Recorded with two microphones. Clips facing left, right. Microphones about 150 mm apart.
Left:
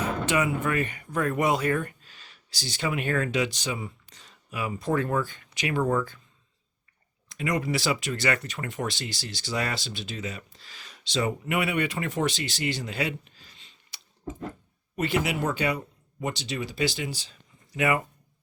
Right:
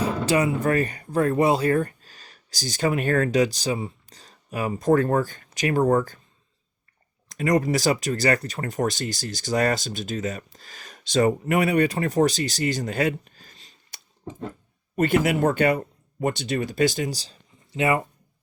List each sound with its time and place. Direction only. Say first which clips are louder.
0.0 s speech: right 4 dB; 35° right (ahead or behind)
7.3 s speech: right 6 dB; 45° right (ahead or behind)
14.9 s speech: right 6 dB; 50° right (ahead or behind); by 18.0 s 30° right (ahead or behind)